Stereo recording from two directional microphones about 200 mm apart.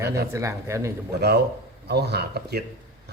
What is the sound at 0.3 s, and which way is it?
Speech, 15° right (ahead or behind).